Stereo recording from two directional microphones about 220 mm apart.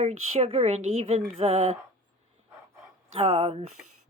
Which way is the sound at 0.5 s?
30° right (ahead or behind).